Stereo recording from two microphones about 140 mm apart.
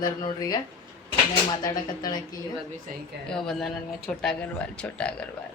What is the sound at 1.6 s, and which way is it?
Speech, 30° left (ahead or behind).